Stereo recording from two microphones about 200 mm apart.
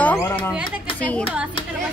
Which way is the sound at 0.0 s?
10° left (ahead or behind).